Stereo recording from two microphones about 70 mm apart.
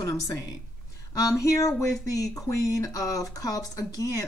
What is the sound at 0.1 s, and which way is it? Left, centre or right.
Speech, left.